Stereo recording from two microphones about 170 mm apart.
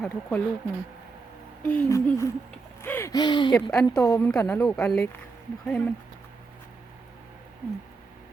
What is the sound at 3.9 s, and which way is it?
A woman's voice, 15° left (ahead or behind).